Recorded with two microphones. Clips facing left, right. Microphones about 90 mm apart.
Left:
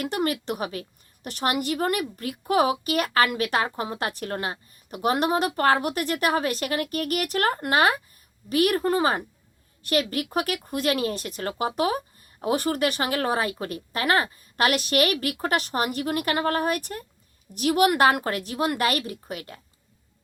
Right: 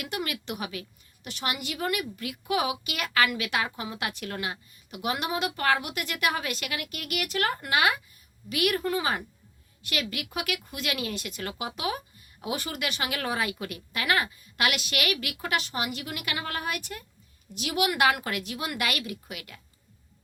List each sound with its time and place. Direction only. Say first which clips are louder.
0.0 s a woman's voice: left 7 dB; 40° left (ahead or behind)